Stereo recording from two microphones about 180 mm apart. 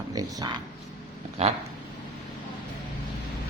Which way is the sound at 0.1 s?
20° right (ahead or behind).